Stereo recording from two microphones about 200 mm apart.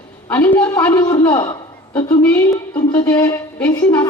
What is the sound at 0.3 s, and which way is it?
Speech, 10° left (ahead or behind).